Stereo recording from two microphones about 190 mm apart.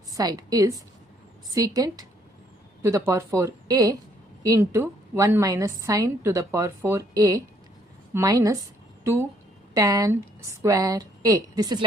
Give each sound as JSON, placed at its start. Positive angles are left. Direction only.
{"t": 0.1, "sound": "a woman's voice", "side_deg": -20}
{"t": 9.7, "sound": "a woman's voice", "side_deg": -20}